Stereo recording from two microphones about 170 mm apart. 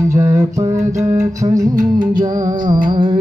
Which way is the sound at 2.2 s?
25° right (ahead or behind).